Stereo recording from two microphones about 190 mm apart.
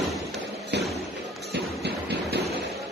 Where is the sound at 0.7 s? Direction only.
65° right (ahead or behind).